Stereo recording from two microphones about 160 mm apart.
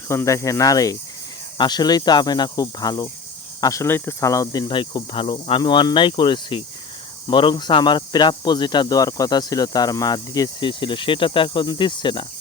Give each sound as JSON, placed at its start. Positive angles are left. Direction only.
{"t": 0.1, "sound": "speech", "side_deg": 15}
{"t": 4.7, "sound": "speech", "side_deg": 30}